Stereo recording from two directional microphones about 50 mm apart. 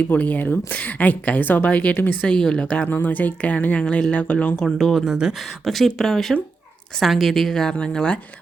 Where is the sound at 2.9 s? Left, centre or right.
Left.